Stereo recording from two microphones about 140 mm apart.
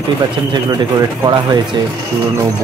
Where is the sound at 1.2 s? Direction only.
35° right (ahead or behind).